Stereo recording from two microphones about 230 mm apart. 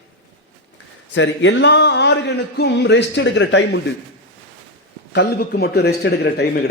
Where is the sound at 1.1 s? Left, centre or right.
Left.